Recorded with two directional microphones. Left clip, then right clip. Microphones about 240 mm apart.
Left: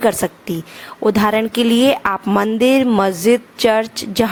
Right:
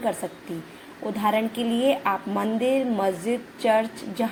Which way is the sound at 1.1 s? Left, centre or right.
Left.